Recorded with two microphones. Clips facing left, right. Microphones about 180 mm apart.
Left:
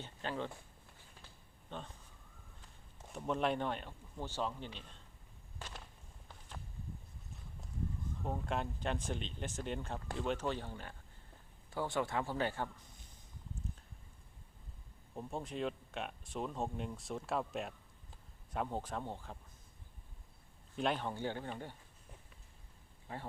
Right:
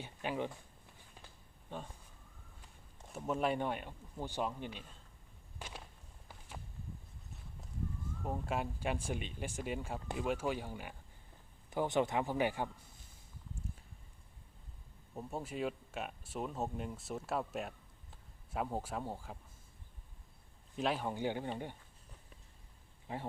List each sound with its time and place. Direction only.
0.0 s a sound: 10° right (ahead or behind)
1.7 s speech: 10° right (ahead or behind)
3.1 s speech: 5° right (ahead or behind)
5.5 s a sound: 15° right (ahead or behind)
8.2 s speech: 5° right (ahead or behind)
15.1 s speech: 5° right (ahead or behind)
20.7 s speech: 5° right (ahead or behind)
21.1 s speech: 15° right (ahead or behind)